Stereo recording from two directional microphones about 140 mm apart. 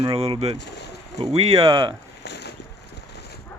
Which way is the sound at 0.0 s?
40° right (ahead or behind).